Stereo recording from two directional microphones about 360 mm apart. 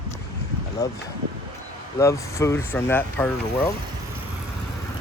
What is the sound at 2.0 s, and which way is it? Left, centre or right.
Speech, centre.